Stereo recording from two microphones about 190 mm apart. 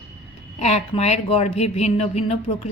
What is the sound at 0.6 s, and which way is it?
Speech, 35° left (ahead or behind).